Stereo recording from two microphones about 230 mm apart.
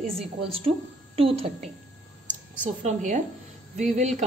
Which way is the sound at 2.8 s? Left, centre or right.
Right.